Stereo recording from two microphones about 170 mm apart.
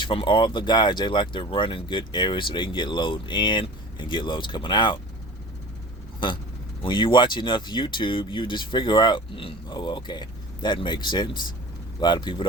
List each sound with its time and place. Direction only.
0.0 s speech: 30° left (ahead or behind)
6.1 s vehicle: 30° left (ahead or behind)
6.8 s speech: 30° left (ahead or behind)